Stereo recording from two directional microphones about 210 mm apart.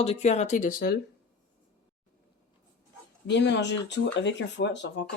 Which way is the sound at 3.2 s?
55° left (ahead or behind).